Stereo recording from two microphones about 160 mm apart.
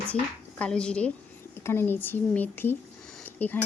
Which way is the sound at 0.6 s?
5° left (ahead or behind).